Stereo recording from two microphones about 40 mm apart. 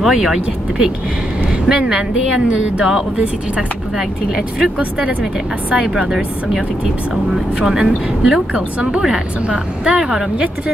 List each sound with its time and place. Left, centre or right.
0.1 s speech: centre
4.6 s speech: right
7.5 s speech: centre